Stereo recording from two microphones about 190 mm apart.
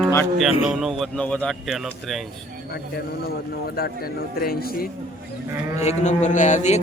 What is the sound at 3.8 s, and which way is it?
Speech, 55° left (ahead or behind).